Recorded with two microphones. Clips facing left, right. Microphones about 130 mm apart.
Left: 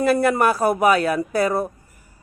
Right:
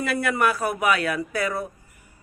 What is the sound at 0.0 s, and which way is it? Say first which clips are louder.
Speech: left 6 dB; 35° left (ahead or behind).